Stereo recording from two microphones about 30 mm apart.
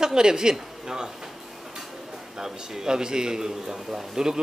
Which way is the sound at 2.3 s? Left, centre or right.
Centre.